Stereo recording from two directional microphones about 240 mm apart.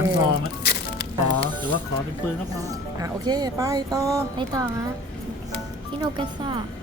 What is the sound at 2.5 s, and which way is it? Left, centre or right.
Speech, centre.